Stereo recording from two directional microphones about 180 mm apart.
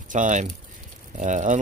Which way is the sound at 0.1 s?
45° right (ahead or behind).